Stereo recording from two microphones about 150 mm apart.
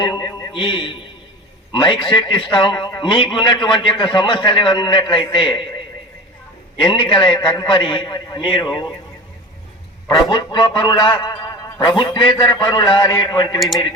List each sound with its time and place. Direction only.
0.0 s a man's voice: 25° left (ahead or behind)
0.5 s a man's voice: 35° left (ahead or behind)
6.8 s a man's voice: 35° left (ahead or behind)
10.1 s a man's voice: 30° left (ahead or behind)